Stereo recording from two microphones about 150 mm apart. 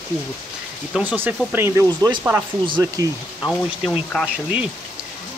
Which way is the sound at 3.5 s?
Centre (ahead or behind).